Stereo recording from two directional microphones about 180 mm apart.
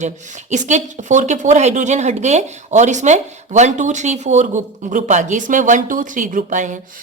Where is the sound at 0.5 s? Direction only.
40° right (ahead or behind).